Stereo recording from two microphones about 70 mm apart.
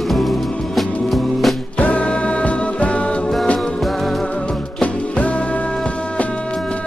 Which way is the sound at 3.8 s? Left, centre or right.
Centre.